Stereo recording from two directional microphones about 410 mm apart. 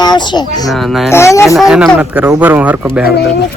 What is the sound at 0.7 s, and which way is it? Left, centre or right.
Speech, centre.